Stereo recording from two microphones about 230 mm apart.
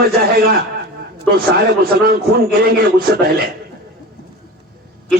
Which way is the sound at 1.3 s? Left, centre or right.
Right.